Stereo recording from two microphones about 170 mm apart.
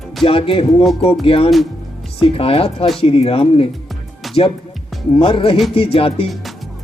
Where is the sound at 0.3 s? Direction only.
30° left (ahead or behind).